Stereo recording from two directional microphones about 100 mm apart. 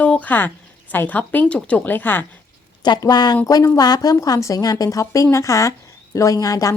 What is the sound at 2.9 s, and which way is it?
A woman's voice, 45° left (ahead or behind).